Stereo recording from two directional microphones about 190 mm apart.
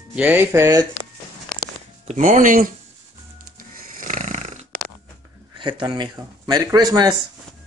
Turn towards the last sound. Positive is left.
turn(degrees=-20)  # may be behind; listen again after turning